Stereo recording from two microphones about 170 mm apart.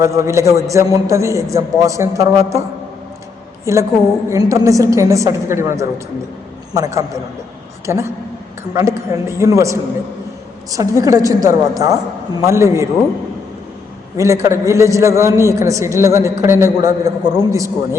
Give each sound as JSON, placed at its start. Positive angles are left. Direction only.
{"t": 0.0, "sound": "a man's voice", "side_deg": -15}
{"t": 3.7, "sound": "a man's voice", "side_deg": -15}
{"t": 14.2, "sound": "a man's voice", "side_deg": -20}